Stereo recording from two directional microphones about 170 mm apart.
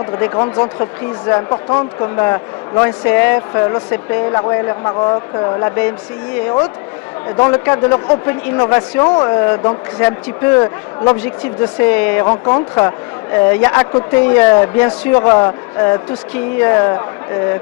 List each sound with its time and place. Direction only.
0.0 s a man's voice: 15° left (ahead or behind)
7.3 s a man's voice: 10° left (ahead or behind)
12.5 s a man's voice: 20° left (ahead or behind)